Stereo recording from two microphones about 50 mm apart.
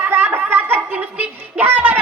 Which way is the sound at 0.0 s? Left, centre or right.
Right.